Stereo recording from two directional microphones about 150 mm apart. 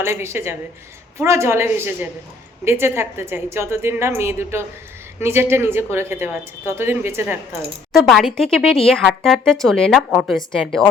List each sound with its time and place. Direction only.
0.0 s a woman's voice: 15° right (ahead or behind)
7.9 s speech: centre (ahead or behind)